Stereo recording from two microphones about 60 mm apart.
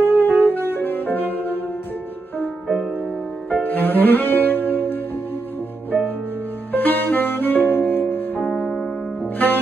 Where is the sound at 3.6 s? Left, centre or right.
Left.